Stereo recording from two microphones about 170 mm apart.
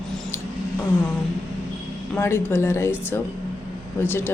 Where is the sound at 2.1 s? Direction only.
10° left (ahead or behind).